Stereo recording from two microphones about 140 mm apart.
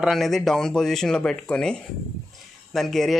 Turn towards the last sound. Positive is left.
turn(degrees=0)  # may be behind; listen again after turning